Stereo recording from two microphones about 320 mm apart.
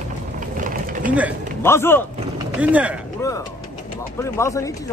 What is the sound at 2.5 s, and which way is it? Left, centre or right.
Speech, centre.